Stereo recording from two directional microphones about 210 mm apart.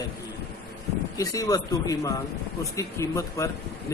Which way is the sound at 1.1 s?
15° left (ahead or behind).